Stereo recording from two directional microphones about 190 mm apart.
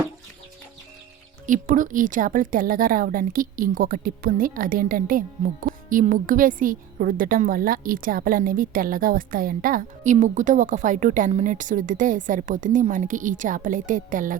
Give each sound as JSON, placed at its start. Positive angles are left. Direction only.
{"t": 1.5, "sound": "a woman's voice", "side_deg": -45}